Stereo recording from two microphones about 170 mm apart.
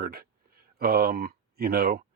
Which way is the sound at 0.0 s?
65° right (ahead or behind).